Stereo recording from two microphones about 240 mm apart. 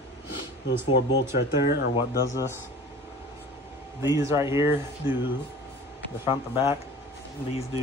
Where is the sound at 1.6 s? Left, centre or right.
Left.